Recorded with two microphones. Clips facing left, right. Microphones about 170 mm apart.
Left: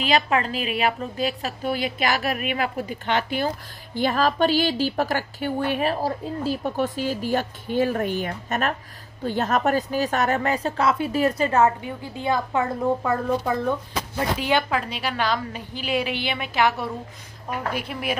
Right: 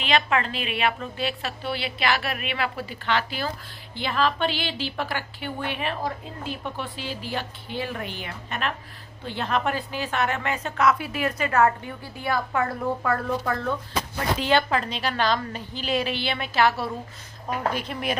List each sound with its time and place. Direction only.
0.0 s a woman's voice: 35° left (ahead or behind)
11.6 s a woman's voice: 20° left (ahead or behind)